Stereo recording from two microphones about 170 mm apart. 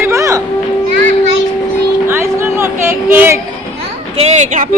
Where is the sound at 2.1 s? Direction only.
15° right (ahead or behind).